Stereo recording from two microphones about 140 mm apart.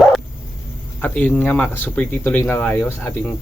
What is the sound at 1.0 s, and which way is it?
Speech, 10° left (ahead or behind).